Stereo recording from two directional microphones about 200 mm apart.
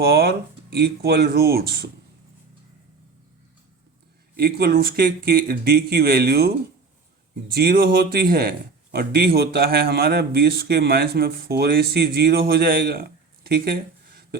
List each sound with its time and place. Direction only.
0.0 s speech: 50° right (ahead or behind)
4.4 s speech: 50° right (ahead or behind)